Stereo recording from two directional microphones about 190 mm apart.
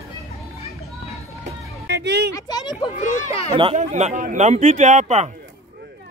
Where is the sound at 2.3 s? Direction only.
20° left (ahead or behind).